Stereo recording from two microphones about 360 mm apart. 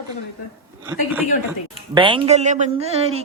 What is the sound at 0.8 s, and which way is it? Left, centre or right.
A woman's voice, centre.